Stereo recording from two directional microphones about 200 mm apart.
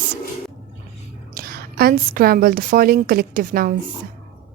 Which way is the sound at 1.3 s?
45° right (ahead or behind).